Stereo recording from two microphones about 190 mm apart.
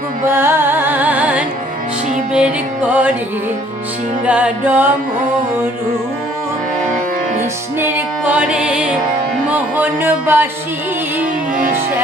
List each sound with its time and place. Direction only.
0.3 s music: 10° right (ahead or behind)
4.3 s music: 5° right (ahead or behind)
7.8 s music: 10° right (ahead or behind)
11.5 s music: 45° right (ahead or behind)